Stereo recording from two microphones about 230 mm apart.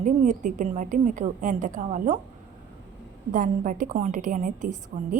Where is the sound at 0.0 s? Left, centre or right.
Right.